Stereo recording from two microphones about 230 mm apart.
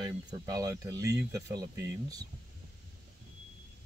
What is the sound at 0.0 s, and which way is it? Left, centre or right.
Speech, centre.